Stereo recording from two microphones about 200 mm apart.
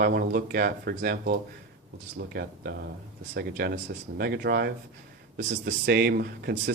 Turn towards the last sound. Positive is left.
turn(degrees=-55)  # may be behind; listen again after turning